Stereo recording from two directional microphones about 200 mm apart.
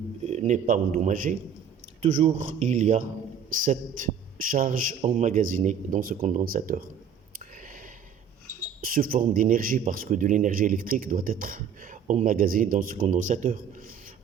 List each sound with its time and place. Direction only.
0.3 s a man's voice: 35° right (ahead or behind)
7.3 s a sound: 45° right (ahead or behind)
8.8 s speech: 45° right (ahead or behind)